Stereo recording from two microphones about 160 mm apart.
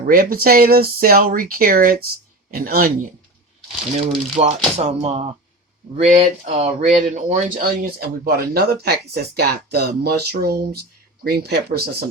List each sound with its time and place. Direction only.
0.0 s speech: 60° right (ahead or behind)
4.4 s speech: 45° right (ahead or behind); by 12.0 s 85° right